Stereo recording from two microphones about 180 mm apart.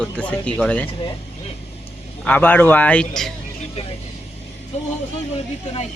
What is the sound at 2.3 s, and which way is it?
A man's voice, 10° left (ahead or behind).